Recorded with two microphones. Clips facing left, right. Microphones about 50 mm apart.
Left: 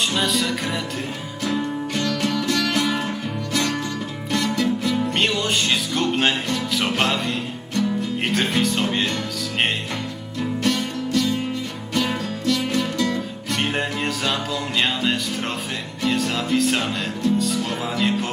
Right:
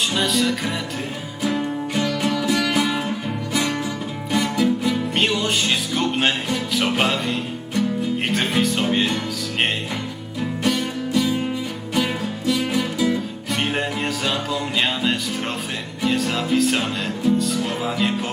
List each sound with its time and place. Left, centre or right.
0.1 s music: centre
1.4 s music: centre
8.3 s speech: centre
10.6 s music: centre